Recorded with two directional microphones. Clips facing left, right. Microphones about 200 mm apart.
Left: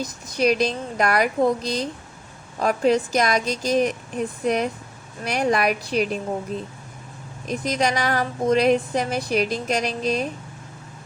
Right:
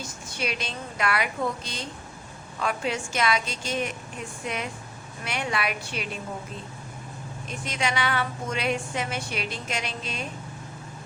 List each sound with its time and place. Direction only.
0.0 s speech: 35° left (ahead or behind)
7.4 s speech: 40° left (ahead or behind)